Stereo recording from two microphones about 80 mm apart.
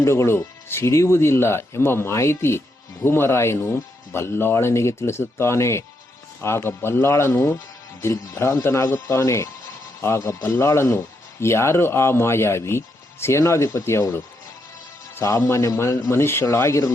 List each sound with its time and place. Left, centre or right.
0.0 s speech: left
15.1 s speech: left